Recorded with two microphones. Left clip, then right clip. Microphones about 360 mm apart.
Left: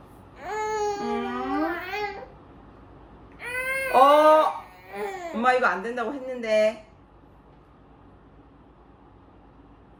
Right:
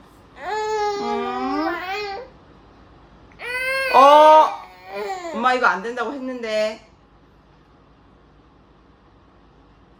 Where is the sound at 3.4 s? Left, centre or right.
Centre.